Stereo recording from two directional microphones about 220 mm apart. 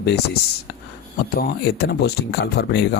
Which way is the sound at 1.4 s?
45° left (ahead or behind).